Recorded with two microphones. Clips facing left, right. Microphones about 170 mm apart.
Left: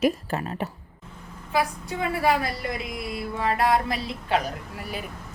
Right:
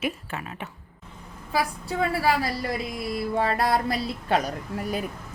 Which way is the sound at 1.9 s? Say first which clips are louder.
Right 2 dB; 30° right (ahead or behind).